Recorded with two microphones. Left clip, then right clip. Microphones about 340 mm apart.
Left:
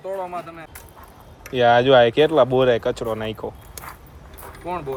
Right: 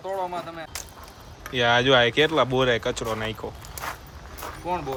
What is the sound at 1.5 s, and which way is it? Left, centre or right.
Speech, centre.